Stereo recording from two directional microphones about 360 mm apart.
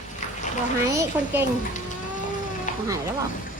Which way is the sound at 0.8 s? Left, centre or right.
Centre.